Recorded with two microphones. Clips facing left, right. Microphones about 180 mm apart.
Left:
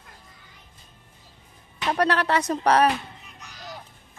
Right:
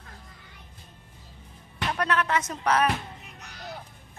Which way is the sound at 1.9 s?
35° left (ahead or behind).